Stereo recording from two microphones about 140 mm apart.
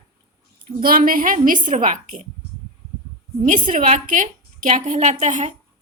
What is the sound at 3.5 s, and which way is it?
A woman's voice, 60° right (ahead or behind).